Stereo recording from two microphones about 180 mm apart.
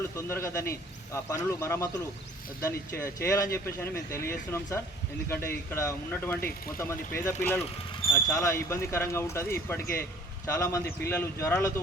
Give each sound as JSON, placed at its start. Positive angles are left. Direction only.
{"t": 0.2, "sound": "speech", "side_deg": 15}